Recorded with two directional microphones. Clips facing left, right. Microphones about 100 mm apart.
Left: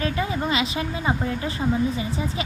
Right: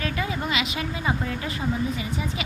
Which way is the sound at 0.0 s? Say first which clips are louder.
Left 3 dB; 30° left (ahead or behind).